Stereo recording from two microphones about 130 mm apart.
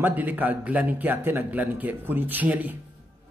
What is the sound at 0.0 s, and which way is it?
A man's voice, 15° right (ahead or behind).